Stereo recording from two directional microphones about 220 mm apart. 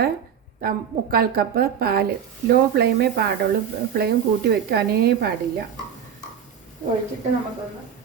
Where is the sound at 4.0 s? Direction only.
45° right (ahead or behind).